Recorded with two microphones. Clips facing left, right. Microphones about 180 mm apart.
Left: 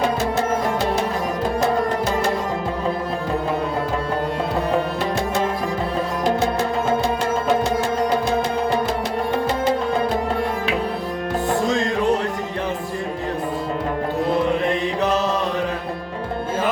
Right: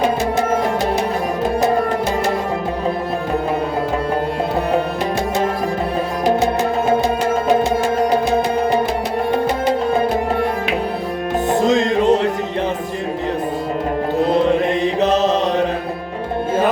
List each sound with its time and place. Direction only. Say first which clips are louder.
6.2 s music: right 5 dB; 15° right (ahead or behind)
11.5 s music: right 7 dB; 20° right (ahead or behind)